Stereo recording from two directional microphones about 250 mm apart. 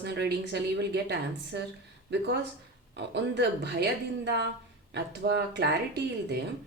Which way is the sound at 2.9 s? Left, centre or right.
Right.